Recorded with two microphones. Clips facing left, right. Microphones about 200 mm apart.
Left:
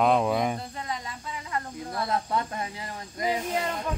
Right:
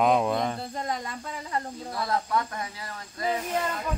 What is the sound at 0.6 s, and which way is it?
Cricket, 45° right (ahead or behind).